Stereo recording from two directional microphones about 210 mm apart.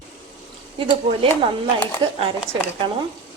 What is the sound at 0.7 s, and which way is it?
Speech, 25° right (ahead or behind).